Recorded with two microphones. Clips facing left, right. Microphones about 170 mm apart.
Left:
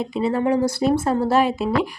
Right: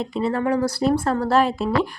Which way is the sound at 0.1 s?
10° left (ahead or behind).